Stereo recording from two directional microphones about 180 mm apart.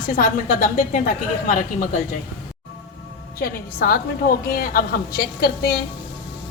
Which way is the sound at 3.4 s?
60° left (ahead or behind).